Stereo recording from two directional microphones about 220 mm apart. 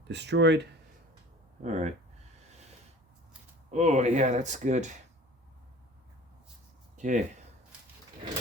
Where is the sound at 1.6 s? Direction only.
35° right (ahead or behind).